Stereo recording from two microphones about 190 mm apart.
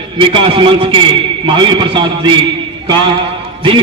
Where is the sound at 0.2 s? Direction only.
25° right (ahead or behind).